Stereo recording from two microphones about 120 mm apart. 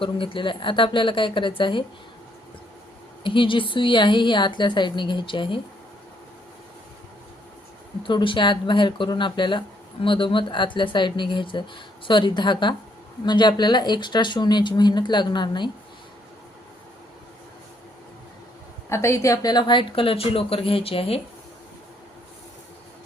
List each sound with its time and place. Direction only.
0.0 s speech: 45° left (ahead or behind)
3.2 s speech: 45° left (ahead or behind)
8.0 s speech: 45° left (ahead or behind)
18.9 s speech: 25° left (ahead or behind); by 21.2 s 55° left (ahead or behind)